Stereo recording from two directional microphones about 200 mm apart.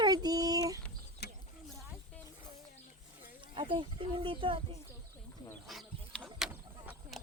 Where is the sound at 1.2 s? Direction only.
55° left (ahead or behind).